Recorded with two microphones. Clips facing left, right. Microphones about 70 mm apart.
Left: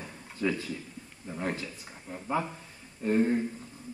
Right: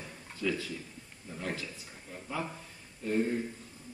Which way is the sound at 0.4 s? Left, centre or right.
Left.